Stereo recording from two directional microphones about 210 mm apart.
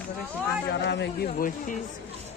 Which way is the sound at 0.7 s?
55° left (ahead or behind).